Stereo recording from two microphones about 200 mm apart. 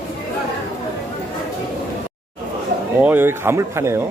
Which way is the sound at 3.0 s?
10° right (ahead or behind).